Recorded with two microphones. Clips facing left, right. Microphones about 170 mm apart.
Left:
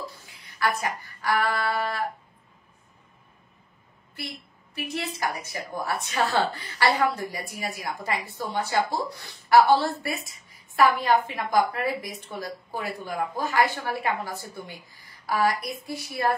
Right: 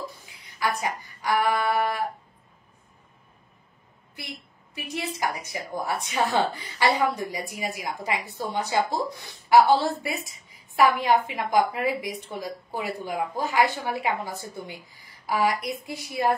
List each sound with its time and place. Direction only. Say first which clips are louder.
0.5 s a woman's voice: even; 15° right (ahead or behind)
4.7 s a woman's voice: even; 15° right (ahead or behind)
10.8 s a woman's voice: even; 15° right (ahead or behind)